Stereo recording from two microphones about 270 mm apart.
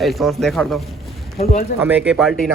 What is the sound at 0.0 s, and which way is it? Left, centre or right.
Speech, centre.